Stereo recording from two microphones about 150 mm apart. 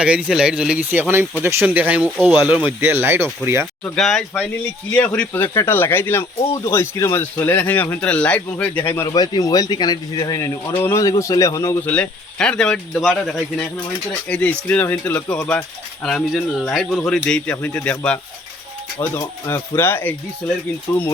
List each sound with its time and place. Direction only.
0.0 s speech: 5° right (ahead or behind)
3.9 s speech: centre (ahead or behind)
9.1 s speech: 25° left (ahead or behind)
11.9 s speech: 5° left (ahead or behind)